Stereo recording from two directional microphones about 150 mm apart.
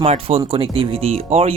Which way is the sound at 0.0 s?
40° right (ahead or behind).